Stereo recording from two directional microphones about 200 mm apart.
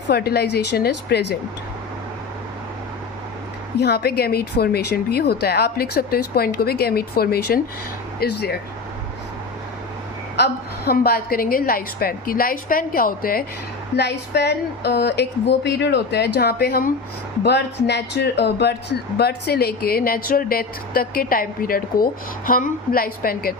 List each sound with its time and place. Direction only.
0.1 s a woman's voice: 55° left (ahead or behind)
3.8 s speech: 55° left (ahead or behind)
10.3 s speech: 55° left (ahead or behind)
13.9 s a woman's voice: 55° left (ahead or behind)